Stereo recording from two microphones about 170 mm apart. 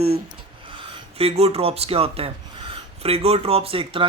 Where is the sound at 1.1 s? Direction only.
35° right (ahead or behind).